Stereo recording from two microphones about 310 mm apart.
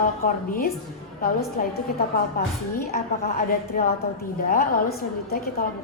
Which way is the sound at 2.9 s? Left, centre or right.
Left.